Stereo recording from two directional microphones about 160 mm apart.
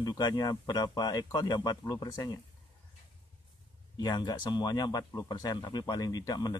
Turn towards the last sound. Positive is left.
turn(degrees=25)  # may be behind; listen again after turning